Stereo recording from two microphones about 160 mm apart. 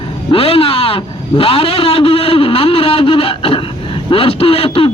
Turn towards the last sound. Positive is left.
turn(degrees=35)  # may be behind; listen again after turning